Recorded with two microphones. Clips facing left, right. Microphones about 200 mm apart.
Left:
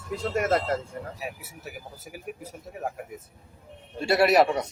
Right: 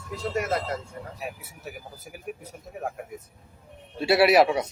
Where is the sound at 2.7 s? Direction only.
5° left (ahead or behind).